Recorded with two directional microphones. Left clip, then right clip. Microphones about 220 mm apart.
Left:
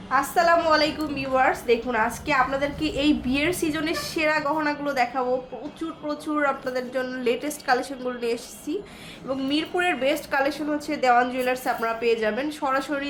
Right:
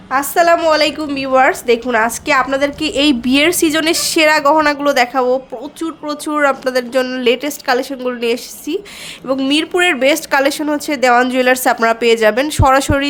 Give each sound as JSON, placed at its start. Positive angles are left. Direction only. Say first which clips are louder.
{"t": 0.1, "sound": "a woman's voice", "louder": "right 8 dB", "side_deg": -55}